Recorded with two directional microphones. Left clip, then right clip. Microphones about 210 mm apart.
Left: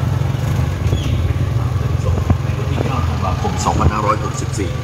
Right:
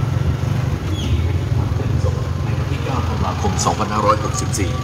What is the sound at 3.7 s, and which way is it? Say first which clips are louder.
Vehicle: even; 40° right (ahead or behind).